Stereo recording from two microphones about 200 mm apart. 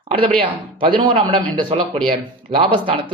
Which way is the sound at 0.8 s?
25° right (ahead or behind).